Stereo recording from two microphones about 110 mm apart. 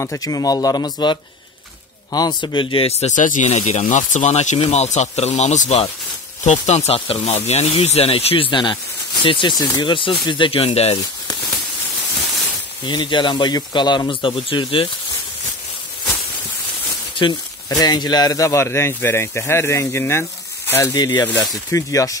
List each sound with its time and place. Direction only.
0.0 s speech: 30° left (ahead or behind)
2.1 s speech: 40° left (ahead or behind); by 11.0 s 70° left (ahead or behind)
12.8 s speech: 45° left (ahead or behind)
17.2 s speech: 40° left (ahead or behind); by 20.9 s 20° left (ahead or behind)
20.9 s speech: 35° left (ahead or behind)